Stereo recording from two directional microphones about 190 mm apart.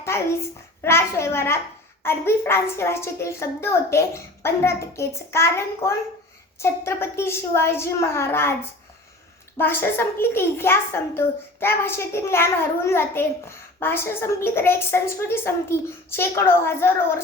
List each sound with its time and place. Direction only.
0.0 s a child's voice: 15° left (ahead or behind)
9.6 s a woman's voice: 10° left (ahead or behind)